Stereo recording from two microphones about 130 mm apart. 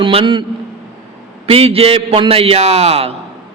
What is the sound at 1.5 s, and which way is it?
Speech, 45° right (ahead or behind).